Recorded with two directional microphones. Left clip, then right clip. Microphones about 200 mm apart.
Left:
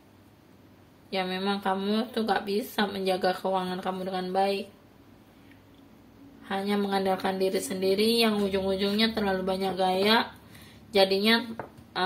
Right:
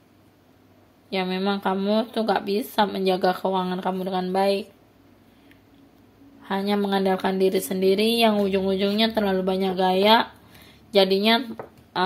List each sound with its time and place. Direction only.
1.1 s speech: 35° right (ahead or behind)
6.4 s speech: 40° right (ahead or behind)